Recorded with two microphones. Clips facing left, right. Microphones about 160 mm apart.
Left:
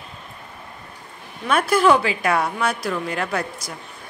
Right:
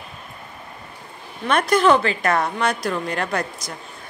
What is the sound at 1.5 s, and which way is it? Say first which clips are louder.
A woman's voice: even; 5° left (ahead or behind).